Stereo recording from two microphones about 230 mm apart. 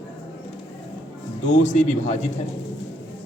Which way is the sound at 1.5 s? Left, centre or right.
Left.